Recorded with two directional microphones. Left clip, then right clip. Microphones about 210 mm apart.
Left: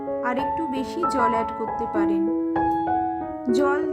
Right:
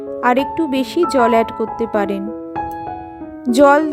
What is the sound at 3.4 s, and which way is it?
Speech, 35° right (ahead or behind).